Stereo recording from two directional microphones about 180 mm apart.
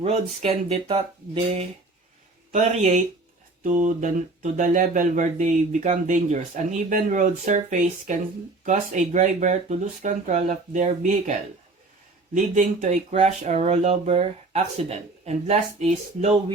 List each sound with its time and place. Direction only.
0.0 s speech: 35° right (ahead or behind)